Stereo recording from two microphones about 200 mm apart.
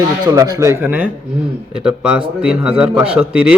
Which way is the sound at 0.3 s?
15° right (ahead or behind).